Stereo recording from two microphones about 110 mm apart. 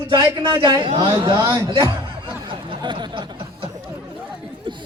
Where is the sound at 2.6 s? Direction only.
45° right (ahead or behind).